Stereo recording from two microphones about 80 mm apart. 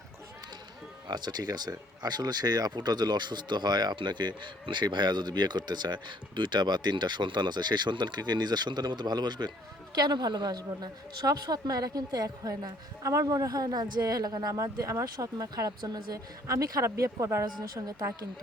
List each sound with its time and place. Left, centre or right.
1.0 s speech: right
16.5 s speech: right